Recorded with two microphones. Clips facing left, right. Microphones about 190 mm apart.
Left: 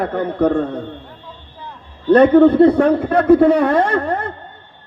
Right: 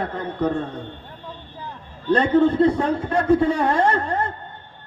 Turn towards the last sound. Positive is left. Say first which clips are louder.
# left 2 dB
turn(degrees=60)  # may be behind; listen again after turning